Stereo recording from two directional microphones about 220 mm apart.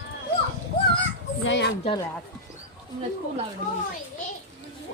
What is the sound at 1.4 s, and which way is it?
Speech, 50° left (ahead or behind).